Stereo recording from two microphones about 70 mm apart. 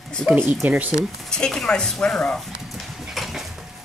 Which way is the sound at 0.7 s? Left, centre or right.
Right.